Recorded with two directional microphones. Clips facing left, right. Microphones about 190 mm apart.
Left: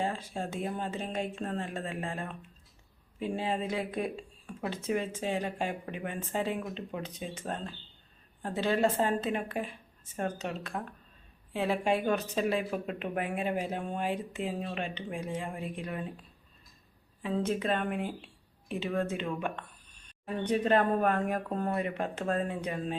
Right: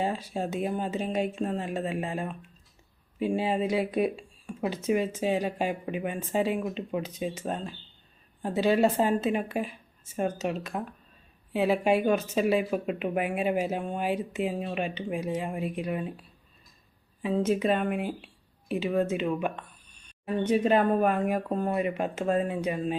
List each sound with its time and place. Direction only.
0.0 s speech: 15° right (ahead or behind)
17.2 s speech: 10° right (ahead or behind)
19.1 s speech: 10° right (ahead or behind)